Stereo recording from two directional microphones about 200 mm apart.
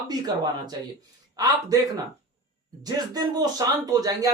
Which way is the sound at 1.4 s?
20° right (ahead or behind).